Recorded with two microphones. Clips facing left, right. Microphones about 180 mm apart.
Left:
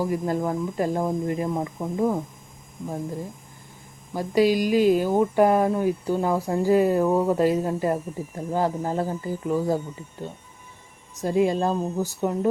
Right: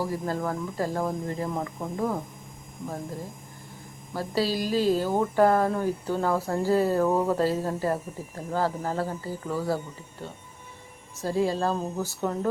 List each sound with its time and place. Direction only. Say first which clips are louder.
0.0 s speech: left 4 dB; 15° left (ahead or behind)
4.1 s speech: left 7 dB; 15° left (ahead or behind)
11.2 s speech: left 4 dB; 20° left (ahead or behind)